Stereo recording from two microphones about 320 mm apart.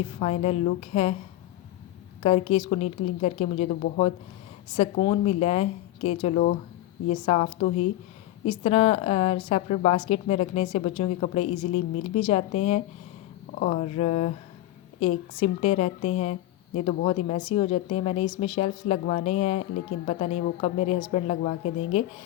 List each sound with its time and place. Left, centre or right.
0.2 s a woman's voice: centre
2.2 s a woman's voice: centre